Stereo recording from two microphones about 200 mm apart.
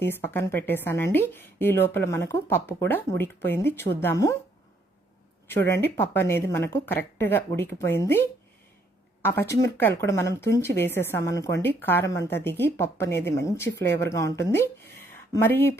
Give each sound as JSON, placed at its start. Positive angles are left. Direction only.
{"t": 0.0, "sound": "a woman's voice", "side_deg": 10}
{"t": 5.5, "sound": "a woman's voice", "side_deg": 10}
{"t": 9.2, "sound": "a woman's voice", "side_deg": 10}